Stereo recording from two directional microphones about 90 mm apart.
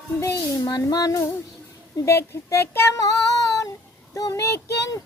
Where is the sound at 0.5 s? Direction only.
50° left (ahead or behind).